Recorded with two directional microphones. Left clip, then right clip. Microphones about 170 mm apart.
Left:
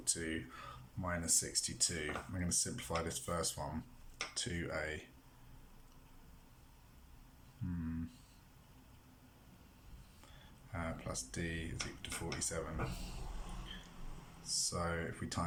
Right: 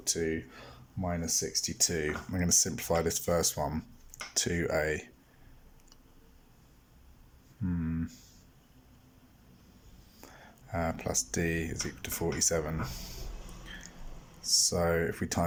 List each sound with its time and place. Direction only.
0.0 s speech: 35° right (ahead or behind)
1.9 s speech: 45° right (ahead or behind)
7.7 s a sound: 40° right (ahead or behind)
10.2 s a sound: 50° right (ahead or behind)
11.3 s speech: 50° right (ahead or behind)
14.4 s speech: 50° right (ahead or behind)